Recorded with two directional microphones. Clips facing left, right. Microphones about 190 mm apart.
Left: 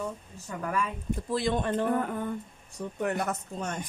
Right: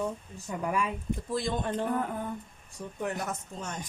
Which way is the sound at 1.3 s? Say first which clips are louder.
Left 4 dB; 65° left (ahead or behind).